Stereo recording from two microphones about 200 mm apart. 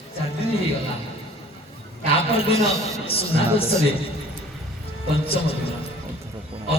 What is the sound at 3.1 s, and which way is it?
Speech, 30° left (ahead or behind).